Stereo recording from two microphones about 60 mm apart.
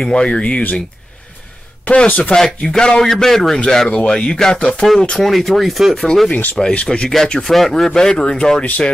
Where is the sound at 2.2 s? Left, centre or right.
Centre.